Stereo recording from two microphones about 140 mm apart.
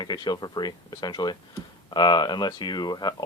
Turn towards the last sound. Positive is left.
turn(degrees=30)  # may be behind; listen again after turning